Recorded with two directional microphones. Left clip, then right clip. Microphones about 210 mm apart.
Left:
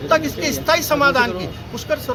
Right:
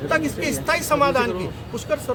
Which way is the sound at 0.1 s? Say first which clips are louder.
Left 5 dB; 5° right (ahead or behind).